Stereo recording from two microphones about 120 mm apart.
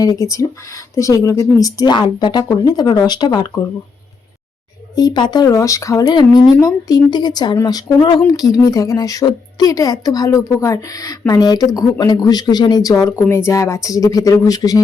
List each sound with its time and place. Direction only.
0.0 s a woman's voice: 30° left (ahead or behind)
4.9 s a woman's voice: 35° left (ahead or behind)